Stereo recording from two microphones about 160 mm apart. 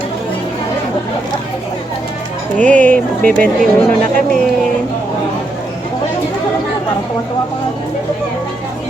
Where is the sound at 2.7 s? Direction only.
10° left (ahead or behind).